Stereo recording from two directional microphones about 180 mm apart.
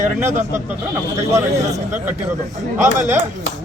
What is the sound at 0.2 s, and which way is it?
Speech, 15° right (ahead or behind).